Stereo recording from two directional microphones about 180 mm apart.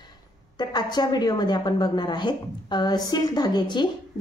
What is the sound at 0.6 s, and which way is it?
A woman's voice, 25° left (ahead or behind).